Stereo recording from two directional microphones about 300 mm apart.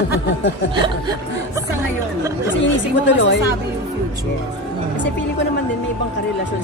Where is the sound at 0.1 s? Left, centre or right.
Left.